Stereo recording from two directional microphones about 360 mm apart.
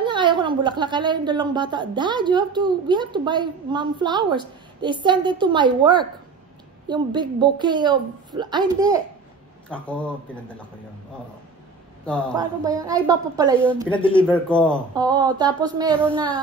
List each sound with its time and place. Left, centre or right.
0.0 s a woman's voice: centre
9.7 s speech: centre
12.4 s a woman's voice: centre
13.8 s speech: centre
14.2 s speech: centre
15.0 s a woman's voice: centre